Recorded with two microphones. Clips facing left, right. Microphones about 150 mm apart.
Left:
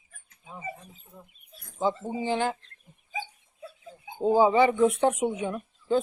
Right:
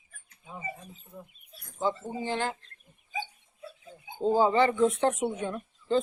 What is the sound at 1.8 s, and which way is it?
Speech, 15° left (ahead or behind).